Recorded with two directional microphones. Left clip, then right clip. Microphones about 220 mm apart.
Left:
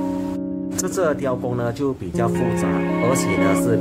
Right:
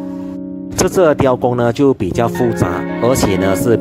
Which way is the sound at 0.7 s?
40° right (ahead or behind).